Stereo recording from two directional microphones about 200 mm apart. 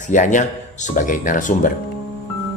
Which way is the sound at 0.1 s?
40° left (ahead or behind).